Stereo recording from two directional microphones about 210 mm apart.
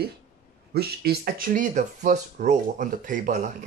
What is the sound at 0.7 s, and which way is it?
Speech, 50° right (ahead or behind).